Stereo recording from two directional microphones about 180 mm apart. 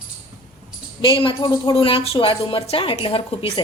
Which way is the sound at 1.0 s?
25° left (ahead or behind).